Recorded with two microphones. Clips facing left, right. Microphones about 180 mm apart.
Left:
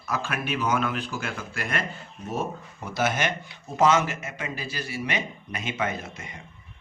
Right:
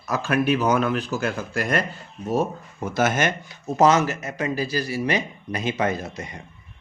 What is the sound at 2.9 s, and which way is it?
Speech, 50° right (ahead or behind).